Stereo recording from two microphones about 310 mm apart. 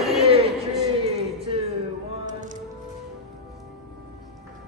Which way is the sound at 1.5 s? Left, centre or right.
Centre.